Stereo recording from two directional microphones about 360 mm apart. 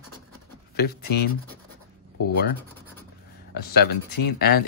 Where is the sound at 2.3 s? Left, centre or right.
Left.